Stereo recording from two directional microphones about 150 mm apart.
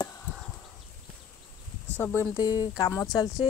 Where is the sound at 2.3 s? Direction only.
25° left (ahead or behind).